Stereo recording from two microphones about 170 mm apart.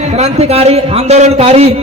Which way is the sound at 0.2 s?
40° right (ahead or behind).